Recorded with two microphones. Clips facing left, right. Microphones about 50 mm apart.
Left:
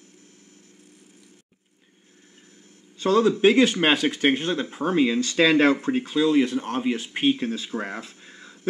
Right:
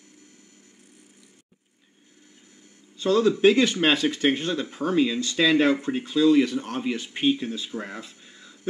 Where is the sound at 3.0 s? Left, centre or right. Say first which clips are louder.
Left 1 dB; left.